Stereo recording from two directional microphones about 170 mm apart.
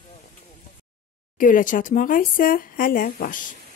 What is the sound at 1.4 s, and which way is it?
Speech, 50° left (ahead or behind).